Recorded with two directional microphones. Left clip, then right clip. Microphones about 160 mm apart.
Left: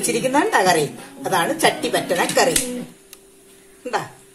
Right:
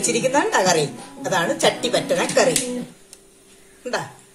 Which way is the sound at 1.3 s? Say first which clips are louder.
Left 1 dB; 10° left (ahead or behind).